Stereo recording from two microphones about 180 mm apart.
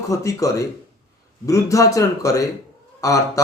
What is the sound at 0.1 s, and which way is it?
Speech, 15° left (ahead or behind).